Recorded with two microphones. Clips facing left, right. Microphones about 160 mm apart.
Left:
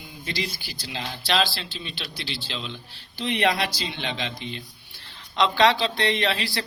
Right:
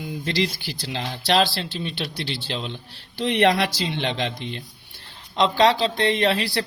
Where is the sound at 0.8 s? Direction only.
50° right (ahead or behind).